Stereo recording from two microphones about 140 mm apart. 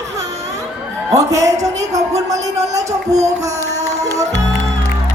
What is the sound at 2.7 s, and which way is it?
Music, 25° right (ahead or behind).